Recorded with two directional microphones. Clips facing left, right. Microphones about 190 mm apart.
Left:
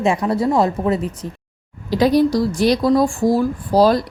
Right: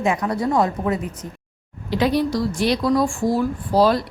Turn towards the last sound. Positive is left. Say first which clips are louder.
# left 3 dB
turn(degrees=40)  # may be behind; listen again after turning